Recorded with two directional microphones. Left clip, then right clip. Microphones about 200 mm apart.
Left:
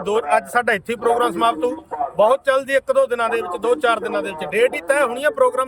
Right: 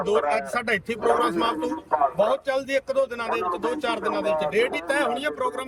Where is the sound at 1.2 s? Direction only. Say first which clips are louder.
Left 6 dB; 30° left (ahead or behind).